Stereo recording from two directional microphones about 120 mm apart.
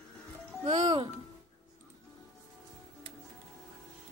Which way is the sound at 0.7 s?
45° right (ahead or behind).